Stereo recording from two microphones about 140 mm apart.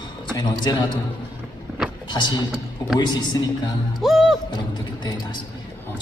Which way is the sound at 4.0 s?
Centre (ahead or behind).